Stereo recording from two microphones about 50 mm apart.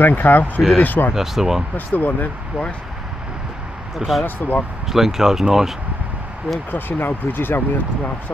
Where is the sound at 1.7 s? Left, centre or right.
Left.